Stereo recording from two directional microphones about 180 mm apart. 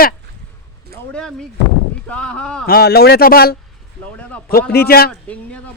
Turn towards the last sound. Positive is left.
turn(degrees=5)  # may be behind; listen again after turning